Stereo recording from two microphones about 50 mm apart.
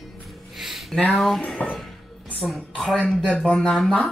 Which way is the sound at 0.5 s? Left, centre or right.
Centre.